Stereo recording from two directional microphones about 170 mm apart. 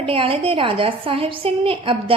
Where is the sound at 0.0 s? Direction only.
30° right (ahead or behind).